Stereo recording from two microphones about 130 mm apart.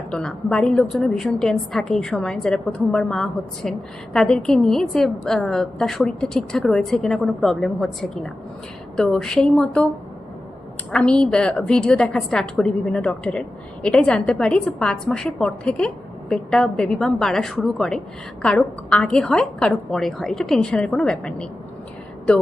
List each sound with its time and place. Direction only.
0.1 s a woman's voice: 5° left (ahead or behind)
10.9 s a woman's voice: 5° left (ahead or behind)